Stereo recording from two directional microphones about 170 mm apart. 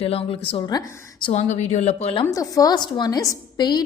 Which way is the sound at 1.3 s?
40° left (ahead or behind).